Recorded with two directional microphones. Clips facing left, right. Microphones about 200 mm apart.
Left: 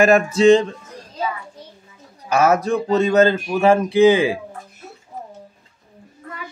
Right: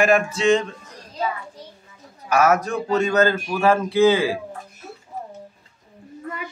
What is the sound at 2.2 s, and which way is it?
A man's voice, 30° left (ahead or behind).